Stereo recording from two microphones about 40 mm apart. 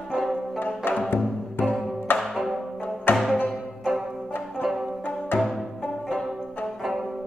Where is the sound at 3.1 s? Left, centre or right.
Left.